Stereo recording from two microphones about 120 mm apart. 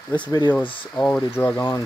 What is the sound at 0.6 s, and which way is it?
Speech, 45° left (ahead or behind).